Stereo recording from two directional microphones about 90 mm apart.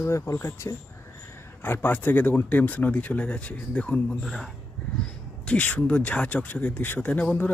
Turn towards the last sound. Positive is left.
turn(degrees=15)  # may be behind; listen again after turning